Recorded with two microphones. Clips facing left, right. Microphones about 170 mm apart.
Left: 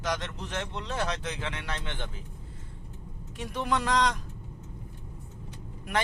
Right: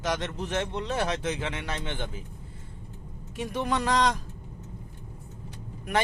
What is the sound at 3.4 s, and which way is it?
Speech, 5° right (ahead or behind).